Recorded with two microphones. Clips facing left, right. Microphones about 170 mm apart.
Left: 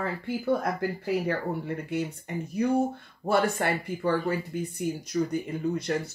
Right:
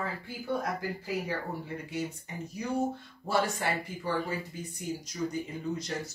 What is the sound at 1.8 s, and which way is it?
Speech, 60° left (ahead or behind).